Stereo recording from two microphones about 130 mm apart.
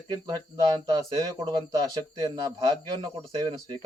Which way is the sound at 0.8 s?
30° right (ahead or behind).